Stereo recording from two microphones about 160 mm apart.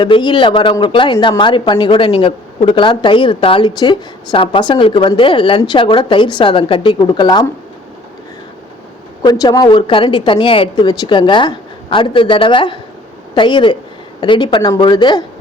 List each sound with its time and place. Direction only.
0.0 s speech: 30° left (ahead or behind)
9.2 s a woman's voice: 25° left (ahead or behind)